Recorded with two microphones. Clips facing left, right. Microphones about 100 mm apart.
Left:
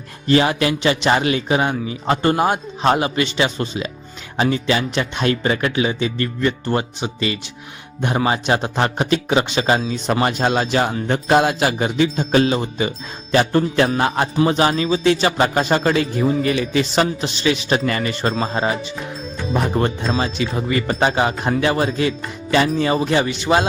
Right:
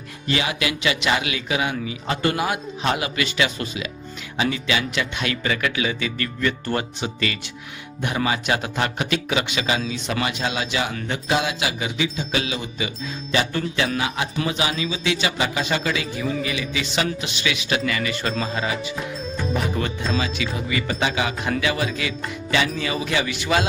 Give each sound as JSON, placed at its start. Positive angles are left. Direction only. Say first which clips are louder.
{"t": 0.3, "sound": "speech", "louder": "left 8 dB", "side_deg": 40}
{"t": 8.0, "sound": "speech", "louder": "left 4 dB", "side_deg": 35}